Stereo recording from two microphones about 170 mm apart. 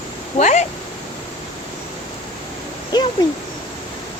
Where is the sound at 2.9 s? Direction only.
25° left (ahead or behind).